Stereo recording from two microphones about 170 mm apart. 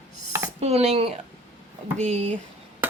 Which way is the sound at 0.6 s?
40° right (ahead or behind).